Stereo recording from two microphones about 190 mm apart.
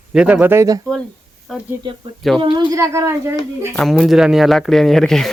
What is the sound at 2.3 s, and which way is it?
Speech, 25° right (ahead or behind).